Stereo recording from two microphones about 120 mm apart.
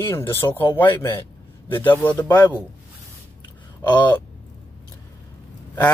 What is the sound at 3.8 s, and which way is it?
Speech, 15° left (ahead or behind).